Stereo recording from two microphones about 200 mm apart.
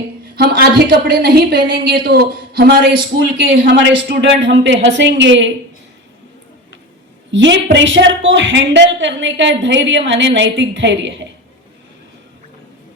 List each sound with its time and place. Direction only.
0.3 s a woman's voice: 50° right (ahead or behind)
3.2 s a woman's voice: 65° right (ahead or behind)
7.3 s a woman's voice: 65° right (ahead or behind)